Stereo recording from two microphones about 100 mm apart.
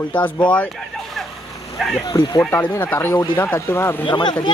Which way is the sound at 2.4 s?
20° left (ahead or behind).